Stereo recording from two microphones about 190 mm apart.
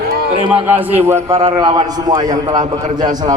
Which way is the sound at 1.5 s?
20° right (ahead or behind).